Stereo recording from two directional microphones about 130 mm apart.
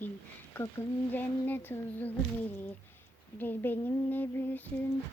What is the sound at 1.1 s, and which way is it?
Child singing, 15° left (ahead or behind).